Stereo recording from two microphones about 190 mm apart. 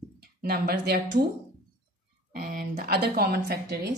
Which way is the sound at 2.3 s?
50° right (ahead or behind).